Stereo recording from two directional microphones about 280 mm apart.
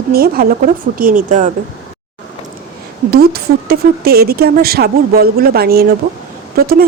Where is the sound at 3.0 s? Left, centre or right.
Right.